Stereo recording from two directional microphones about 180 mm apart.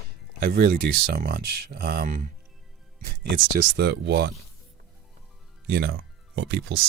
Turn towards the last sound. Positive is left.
turn(degrees=-65)  # may be behind; listen again after turning